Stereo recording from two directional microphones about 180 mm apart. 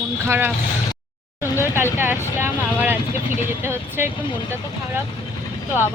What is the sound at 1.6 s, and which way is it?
Speech, 15° right (ahead or behind).